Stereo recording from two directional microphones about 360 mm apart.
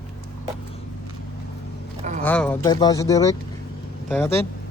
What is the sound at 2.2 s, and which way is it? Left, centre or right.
Speech, centre.